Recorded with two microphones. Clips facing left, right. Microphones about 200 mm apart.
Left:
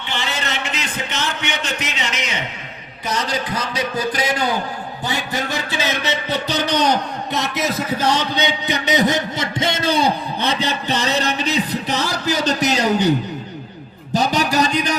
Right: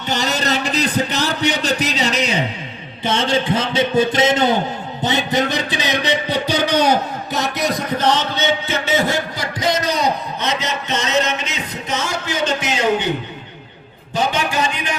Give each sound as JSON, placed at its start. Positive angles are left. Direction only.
{"t": 0.1, "sound": "a man's voice", "side_deg": -40}
{"t": 5.0, "sound": "music", "side_deg": -20}
{"t": 14.1, "sound": "speech", "side_deg": 40}